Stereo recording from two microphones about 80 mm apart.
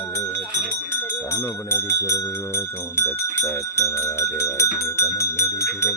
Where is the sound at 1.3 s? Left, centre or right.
Left.